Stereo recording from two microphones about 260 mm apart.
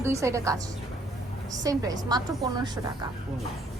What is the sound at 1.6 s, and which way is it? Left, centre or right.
A woman's voice, centre.